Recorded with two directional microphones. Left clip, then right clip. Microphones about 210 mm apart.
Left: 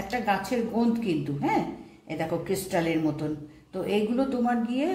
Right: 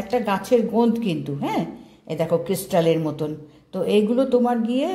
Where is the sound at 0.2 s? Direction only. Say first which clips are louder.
Right 6 dB; 40° right (ahead or behind).